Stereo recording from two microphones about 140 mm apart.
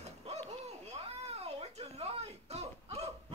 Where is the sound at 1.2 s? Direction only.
45° right (ahead or behind).